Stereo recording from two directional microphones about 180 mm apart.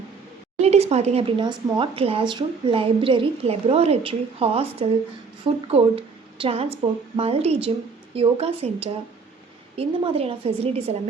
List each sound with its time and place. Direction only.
0.6 s a woman's voice: 35° right (ahead or behind)